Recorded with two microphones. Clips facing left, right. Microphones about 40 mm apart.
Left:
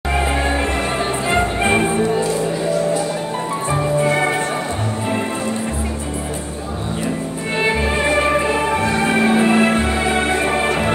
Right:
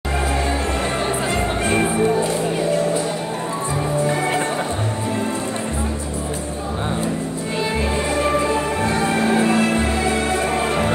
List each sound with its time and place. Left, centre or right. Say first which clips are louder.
1.3 s music: left 7 dB; left
4.0 s music: left 3 dB; left
7.6 s music: left 5 dB; left